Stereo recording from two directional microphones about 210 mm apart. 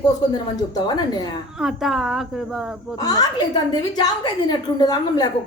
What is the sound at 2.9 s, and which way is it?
A woman's voice, 20° left (ahead or behind).